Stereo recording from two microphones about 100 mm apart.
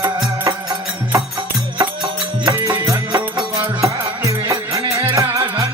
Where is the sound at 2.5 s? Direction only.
40° right (ahead or behind).